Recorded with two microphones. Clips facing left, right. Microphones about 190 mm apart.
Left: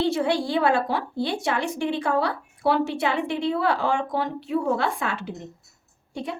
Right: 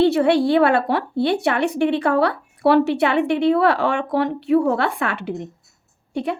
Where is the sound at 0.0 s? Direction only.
65° right (ahead or behind).